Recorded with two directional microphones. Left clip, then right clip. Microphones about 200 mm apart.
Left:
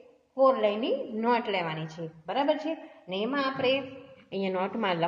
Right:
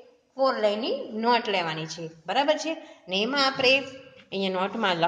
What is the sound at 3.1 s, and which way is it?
Speech, 30° right (ahead or behind).